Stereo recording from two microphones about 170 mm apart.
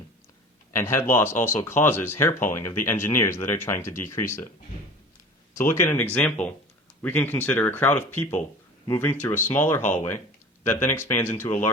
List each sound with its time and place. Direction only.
0.8 s speech: 15° left (ahead or behind)
5.8 s speech: 15° left (ahead or behind)